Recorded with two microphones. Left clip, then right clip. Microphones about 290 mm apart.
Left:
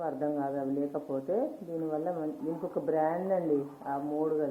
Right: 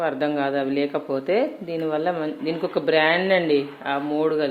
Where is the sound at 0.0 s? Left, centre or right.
Right.